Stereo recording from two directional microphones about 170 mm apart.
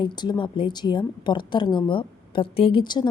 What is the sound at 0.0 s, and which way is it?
A woman's voice, 25° left (ahead or behind).